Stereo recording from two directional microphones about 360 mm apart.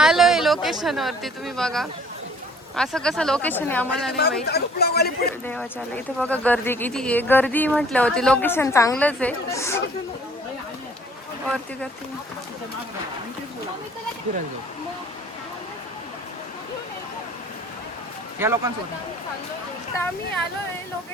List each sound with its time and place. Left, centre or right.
0.0 s speech: centre
4.2 s speech: left
6.1 s speech: centre
11.4 s speech: centre
18.3 s speech: centre